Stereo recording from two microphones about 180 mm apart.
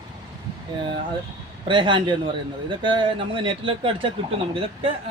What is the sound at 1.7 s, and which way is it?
Speech, 25° right (ahead or behind).